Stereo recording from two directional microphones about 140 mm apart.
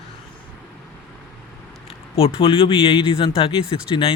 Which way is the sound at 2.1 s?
40° left (ahead or behind).